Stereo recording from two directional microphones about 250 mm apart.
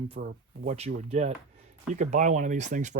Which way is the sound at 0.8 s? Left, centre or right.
Right.